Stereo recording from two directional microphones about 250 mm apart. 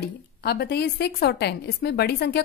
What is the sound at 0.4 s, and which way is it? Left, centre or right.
A woman's voice, left.